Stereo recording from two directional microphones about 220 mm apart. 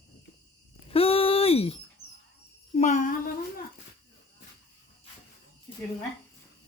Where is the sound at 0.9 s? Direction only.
25° left (ahead or behind).